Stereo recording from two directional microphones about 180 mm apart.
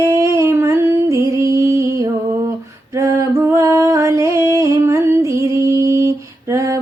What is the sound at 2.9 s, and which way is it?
Music, 15° right (ahead or behind).